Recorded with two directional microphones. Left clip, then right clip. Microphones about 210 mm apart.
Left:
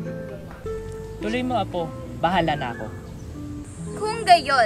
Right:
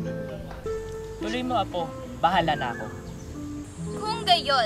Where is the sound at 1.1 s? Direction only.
15° right (ahead or behind).